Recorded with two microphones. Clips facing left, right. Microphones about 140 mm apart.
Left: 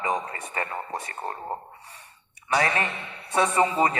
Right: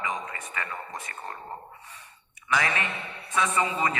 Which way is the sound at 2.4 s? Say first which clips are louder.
Left 3 dB; 35° left (ahead or behind).